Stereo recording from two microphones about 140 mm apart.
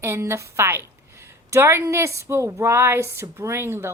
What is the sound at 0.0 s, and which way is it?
A woman's voice, 20° right (ahead or behind).